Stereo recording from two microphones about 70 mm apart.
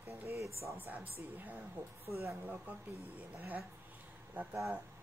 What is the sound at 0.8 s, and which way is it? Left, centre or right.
Speech, right.